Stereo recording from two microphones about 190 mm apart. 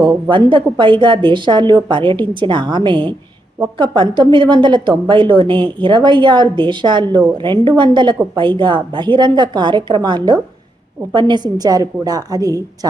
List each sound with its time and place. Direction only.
0.1 s a woman's voice: 25° right (ahead or behind)